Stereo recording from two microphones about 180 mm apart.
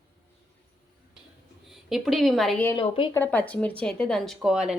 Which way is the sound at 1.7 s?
Centre (ahead or behind).